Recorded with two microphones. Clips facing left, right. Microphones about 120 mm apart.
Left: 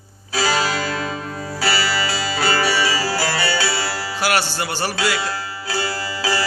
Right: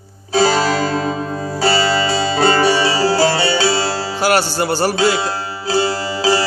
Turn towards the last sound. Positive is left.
turn(degrees=-25)  # may be behind; listen again after turning